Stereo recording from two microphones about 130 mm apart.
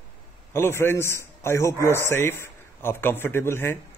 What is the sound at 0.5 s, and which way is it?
A man's voice, 20° left (ahead or behind).